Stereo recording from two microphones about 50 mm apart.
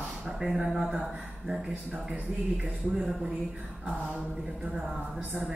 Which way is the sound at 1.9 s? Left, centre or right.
Right.